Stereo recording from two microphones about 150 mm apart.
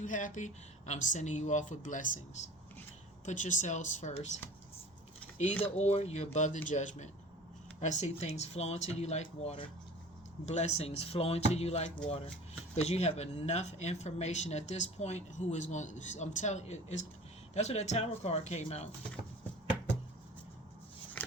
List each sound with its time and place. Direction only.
0.0 s speech: 60° left (ahead or behind)
5.7 s speech: 45° left (ahead or behind)
21.2 s a sound: 5° left (ahead or behind)